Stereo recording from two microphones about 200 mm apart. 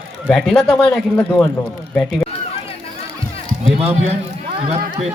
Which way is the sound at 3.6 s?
30° right (ahead or behind).